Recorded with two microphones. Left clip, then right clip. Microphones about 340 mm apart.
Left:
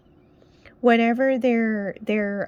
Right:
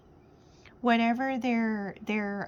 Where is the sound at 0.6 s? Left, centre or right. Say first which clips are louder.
Left 8 dB; centre.